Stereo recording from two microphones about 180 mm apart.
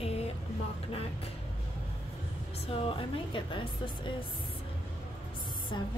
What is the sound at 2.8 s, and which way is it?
Speech, 25° left (ahead or behind).